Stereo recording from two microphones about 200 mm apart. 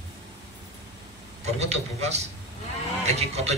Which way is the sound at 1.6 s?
30° right (ahead or behind).